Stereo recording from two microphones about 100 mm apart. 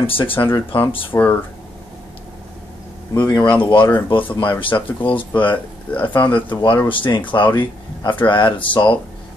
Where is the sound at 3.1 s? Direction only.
45° left (ahead or behind).